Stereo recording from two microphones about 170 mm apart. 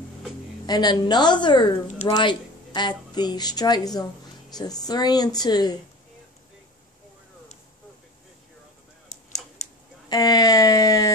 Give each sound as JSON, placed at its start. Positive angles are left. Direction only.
{"t": 0.7, "sound": "a woman's voice", "side_deg": 25}
{"t": 9.1, "sound": "tick-tock", "side_deg": 40}
{"t": 10.0, "sound": "a woman's voice", "side_deg": 25}